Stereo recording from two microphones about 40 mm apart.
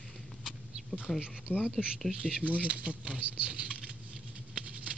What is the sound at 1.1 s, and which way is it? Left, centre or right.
Speech, centre.